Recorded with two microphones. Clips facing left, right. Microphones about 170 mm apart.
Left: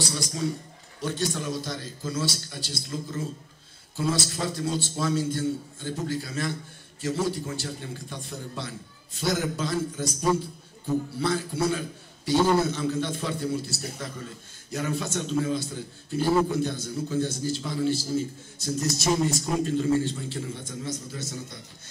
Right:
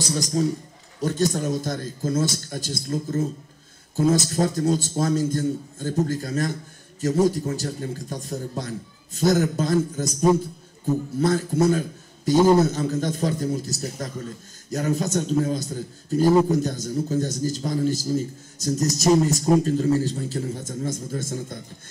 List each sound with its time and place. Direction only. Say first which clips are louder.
0.0 s a man's voice: right 6 dB; 45° right (ahead or behind)
11.1 s a man's voice: right 6 dB; 45° right (ahead or behind)